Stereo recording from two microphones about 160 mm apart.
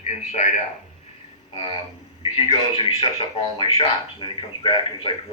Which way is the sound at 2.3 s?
35° left (ahead or behind).